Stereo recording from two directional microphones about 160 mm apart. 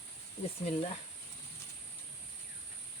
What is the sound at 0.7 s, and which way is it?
Cricket, 40° left (ahead or behind).